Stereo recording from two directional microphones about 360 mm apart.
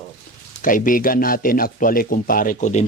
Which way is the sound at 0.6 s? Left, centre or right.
Left.